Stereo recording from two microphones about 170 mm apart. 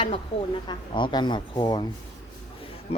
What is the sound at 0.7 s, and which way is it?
A man's voice, 25° left (ahead or behind).